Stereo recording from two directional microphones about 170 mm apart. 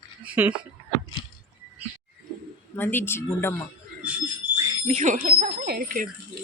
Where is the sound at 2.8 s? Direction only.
10° left (ahead or behind).